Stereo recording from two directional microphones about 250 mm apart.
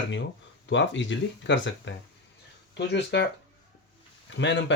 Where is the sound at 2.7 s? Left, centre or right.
Left.